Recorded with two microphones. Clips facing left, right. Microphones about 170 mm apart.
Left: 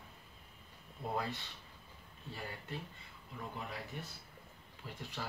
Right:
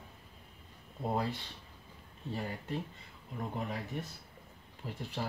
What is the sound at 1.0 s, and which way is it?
Speech, 35° right (ahead or behind).